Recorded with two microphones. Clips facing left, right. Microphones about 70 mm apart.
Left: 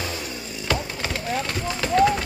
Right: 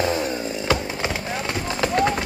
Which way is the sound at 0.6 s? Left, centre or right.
Centre.